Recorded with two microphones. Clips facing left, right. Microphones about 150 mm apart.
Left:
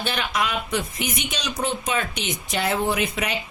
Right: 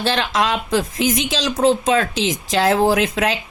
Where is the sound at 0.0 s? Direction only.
90° right.